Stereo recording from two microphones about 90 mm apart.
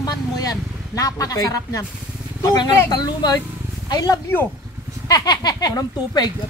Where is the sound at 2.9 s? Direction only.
50° left (ahead or behind).